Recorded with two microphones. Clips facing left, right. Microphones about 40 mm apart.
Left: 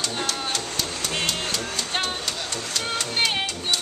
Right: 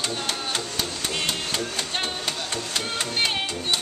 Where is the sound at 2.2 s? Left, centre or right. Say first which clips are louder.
Right 1 dB; centre.